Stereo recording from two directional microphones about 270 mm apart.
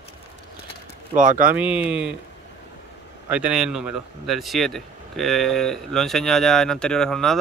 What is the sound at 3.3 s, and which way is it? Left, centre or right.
Speech, centre.